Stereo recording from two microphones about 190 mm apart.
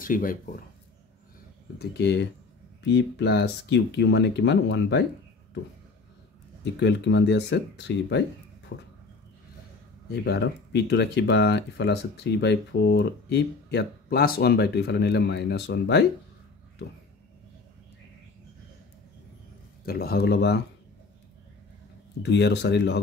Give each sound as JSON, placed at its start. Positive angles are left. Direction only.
{"t": 0.0, "sound": "speech", "side_deg": 45}
{"t": 1.8, "sound": "speech", "side_deg": 65}
{"t": 6.6, "sound": "speech", "side_deg": 70}
{"t": 10.2, "sound": "speech", "side_deg": 60}
{"t": 19.8, "sound": "speech", "side_deg": 50}
{"t": 22.2, "sound": "speech", "side_deg": 65}